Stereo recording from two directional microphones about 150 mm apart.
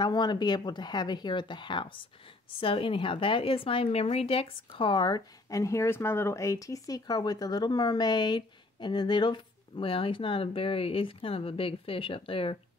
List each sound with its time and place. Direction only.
0.0 s speech: 30° left (ahead or behind)